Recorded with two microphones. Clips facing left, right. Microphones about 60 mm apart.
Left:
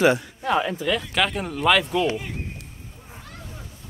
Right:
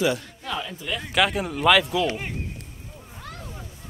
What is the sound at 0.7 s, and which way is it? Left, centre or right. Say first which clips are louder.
Speech: left 7 dB; left.